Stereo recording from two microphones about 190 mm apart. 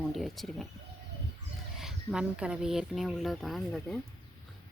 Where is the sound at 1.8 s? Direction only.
5° right (ahead or behind).